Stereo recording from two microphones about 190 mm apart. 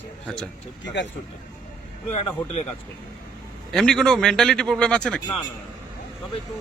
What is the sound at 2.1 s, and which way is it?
Speech, 35° left (ahead or behind).